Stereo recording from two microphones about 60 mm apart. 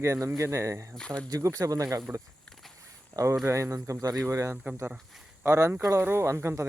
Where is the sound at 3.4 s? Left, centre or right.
Right.